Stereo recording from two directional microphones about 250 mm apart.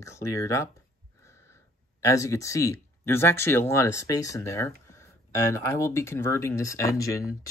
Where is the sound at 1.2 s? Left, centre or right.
Centre.